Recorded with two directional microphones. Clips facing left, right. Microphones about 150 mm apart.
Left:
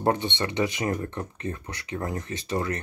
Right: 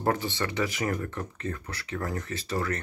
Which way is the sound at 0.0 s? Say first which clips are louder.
Left 3 dB; 25° left (ahead or behind).